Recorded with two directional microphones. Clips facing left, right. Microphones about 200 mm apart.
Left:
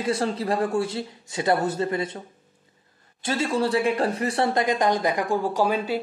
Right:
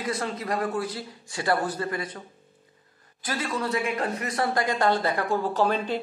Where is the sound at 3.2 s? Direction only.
25° left (ahead or behind); by 6.0 s 10° left (ahead or behind).